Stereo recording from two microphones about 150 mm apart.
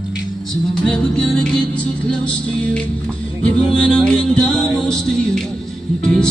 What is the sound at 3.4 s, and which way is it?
Music, 5° left (ahead or behind).